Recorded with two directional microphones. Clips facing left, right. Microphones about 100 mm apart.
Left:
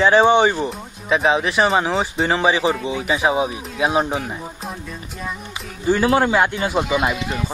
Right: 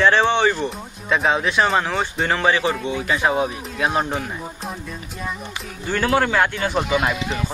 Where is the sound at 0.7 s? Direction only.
Centre (ahead or behind).